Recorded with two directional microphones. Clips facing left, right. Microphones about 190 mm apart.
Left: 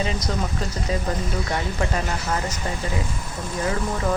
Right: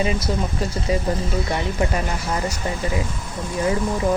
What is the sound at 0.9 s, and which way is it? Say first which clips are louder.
Speech: right 4 dB; 10° right (ahead or behind).